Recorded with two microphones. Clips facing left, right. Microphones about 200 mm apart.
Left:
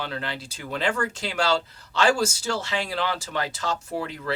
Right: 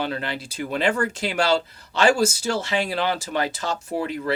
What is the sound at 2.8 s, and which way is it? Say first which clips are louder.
Speech: right 3 dB; 15° right (ahead or behind).